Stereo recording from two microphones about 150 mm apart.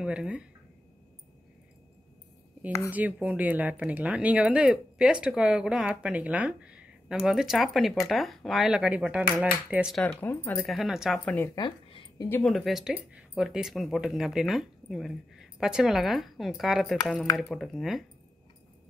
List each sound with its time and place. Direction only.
0.0 s speech: 5° right (ahead or behind)
2.9 s speech: 10° right (ahead or behind)
10.0 s speech: 15° left (ahead or behind)
10.7 s speech: centre (ahead or behind)
11.2 s speech: 10° left (ahead or behind)
11.5 s a sound: 30° left (ahead or behind)
12.4 s speech: centre (ahead or behind)